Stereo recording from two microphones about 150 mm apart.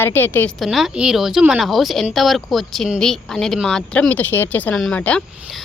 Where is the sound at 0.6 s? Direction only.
Centre (ahead or behind).